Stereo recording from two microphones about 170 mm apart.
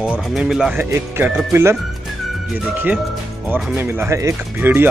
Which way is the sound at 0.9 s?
15° right (ahead or behind).